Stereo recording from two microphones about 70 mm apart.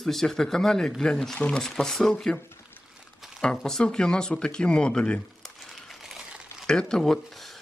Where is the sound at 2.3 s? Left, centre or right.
Left.